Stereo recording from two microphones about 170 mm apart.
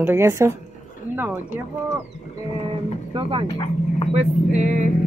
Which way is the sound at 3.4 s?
30° left (ahead or behind).